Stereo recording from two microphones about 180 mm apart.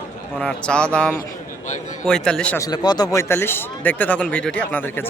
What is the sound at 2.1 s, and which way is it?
Speech, 5° left (ahead or behind).